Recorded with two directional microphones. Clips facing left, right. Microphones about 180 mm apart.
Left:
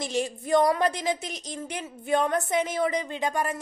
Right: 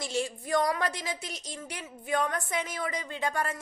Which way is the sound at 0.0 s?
20° left (ahead or behind).